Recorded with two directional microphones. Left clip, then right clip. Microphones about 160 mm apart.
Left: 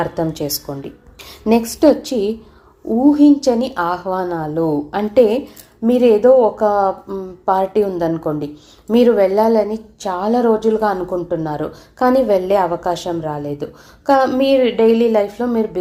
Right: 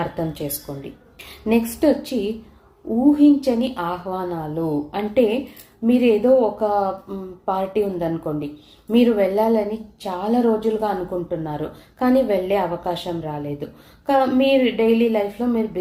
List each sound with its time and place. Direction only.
0.0 s a woman's voice: 35° left (ahead or behind)